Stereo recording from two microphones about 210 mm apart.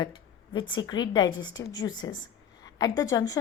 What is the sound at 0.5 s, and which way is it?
A woman's voice, 20° left (ahead or behind).